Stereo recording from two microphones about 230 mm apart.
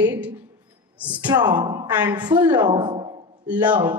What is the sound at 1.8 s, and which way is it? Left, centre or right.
Speech, centre.